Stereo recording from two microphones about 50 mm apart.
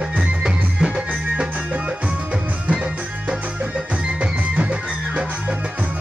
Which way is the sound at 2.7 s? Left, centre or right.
Right.